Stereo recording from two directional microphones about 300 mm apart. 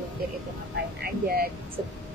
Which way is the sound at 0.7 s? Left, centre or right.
Right.